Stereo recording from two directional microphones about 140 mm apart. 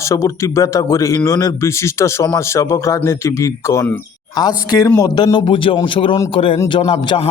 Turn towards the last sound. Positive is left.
turn(degrees=35)  # may be behind; listen again after turning